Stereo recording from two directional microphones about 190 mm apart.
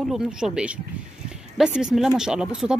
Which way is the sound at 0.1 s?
5° right (ahead or behind).